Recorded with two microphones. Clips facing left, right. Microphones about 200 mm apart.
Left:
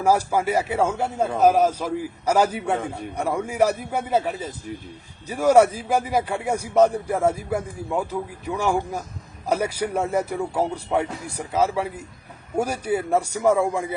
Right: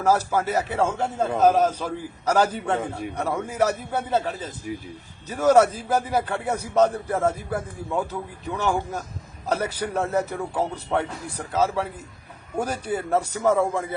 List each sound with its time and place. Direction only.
0.0 s a man's voice: 10° left (ahead or behind)